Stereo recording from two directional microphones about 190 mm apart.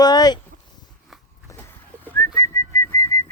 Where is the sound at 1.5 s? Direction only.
15° left (ahead or behind).